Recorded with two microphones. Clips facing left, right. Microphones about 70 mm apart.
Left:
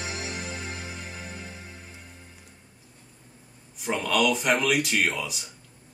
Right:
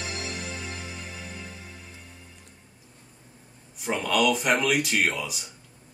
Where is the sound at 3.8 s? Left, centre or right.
Centre.